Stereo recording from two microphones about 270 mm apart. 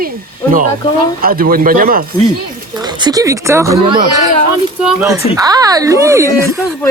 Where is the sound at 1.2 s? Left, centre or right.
Right.